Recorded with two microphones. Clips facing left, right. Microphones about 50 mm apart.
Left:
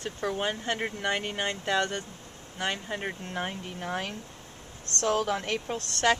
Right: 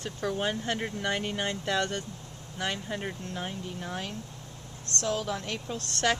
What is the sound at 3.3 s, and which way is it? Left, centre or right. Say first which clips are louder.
Speech: left 2 dB; left.